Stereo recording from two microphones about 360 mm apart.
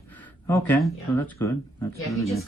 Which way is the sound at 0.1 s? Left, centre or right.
Centre.